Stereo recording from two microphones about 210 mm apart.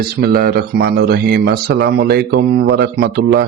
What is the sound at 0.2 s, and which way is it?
A man's voice, 45° right (ahead or behind).